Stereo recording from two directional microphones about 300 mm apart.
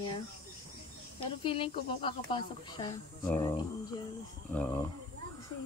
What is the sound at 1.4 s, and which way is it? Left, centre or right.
Speech, centre.